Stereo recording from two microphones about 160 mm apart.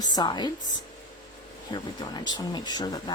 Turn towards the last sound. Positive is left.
turn(degrees=25)  # may be behind; listen again after turning